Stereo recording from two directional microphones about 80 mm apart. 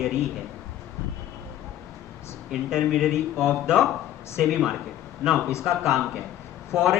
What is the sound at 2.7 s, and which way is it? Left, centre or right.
Speech, centre.